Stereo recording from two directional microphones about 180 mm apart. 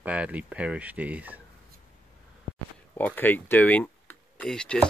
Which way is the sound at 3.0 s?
10° left (ahead or behind).